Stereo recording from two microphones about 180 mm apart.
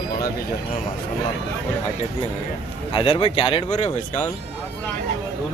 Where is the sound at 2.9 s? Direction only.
30° left (ahead or behind).